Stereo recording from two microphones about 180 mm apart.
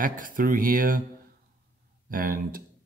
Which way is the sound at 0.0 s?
50° right (ahead or behind).